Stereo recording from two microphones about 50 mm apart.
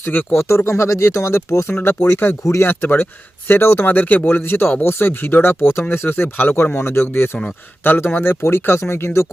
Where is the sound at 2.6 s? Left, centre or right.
Left.